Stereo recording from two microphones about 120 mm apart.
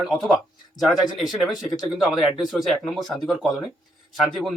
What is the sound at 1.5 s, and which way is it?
Speech, 35° left (ahead or behind).